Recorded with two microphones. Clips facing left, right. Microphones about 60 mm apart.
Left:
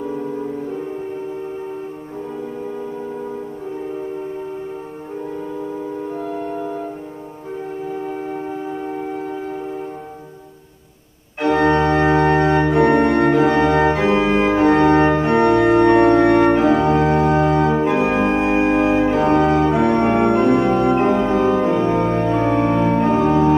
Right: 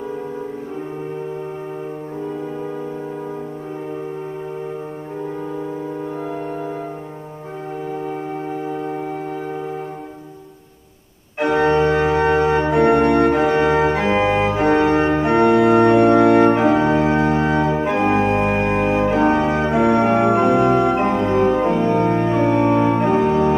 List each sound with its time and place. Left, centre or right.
6.2 s music: centre
11.3 s organ: centre